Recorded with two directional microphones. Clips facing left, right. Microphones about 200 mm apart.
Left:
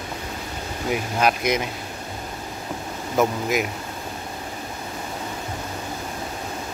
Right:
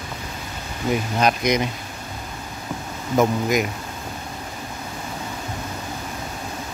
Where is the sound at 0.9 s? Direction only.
5° left (ahead or behind).